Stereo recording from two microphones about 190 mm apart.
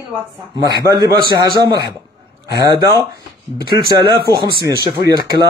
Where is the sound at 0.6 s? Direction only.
20° right (ahead or behind).